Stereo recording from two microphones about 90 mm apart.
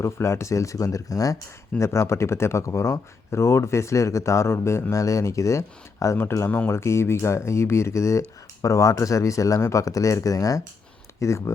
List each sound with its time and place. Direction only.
0.0 s speech: 30° left (ahead or behind)